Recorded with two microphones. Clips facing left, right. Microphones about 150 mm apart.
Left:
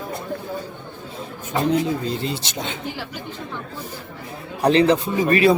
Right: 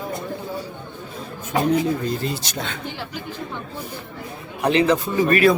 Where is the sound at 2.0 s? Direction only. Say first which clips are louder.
Even; 25° left (ahead or behind).